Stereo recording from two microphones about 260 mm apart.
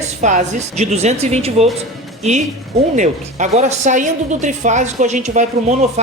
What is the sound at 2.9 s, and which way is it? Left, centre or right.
Speech, right.